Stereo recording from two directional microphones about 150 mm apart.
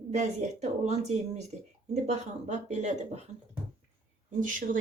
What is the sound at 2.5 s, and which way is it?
Speech, 50° right (ahead or behind).